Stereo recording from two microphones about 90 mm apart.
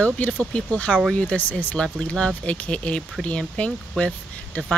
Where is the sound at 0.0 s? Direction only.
15° left (ahead or behind).